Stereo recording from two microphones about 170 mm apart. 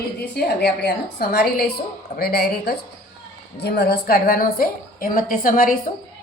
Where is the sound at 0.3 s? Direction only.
70° left (ahead or behind); by 5.7 s 55° left (ahead or behind).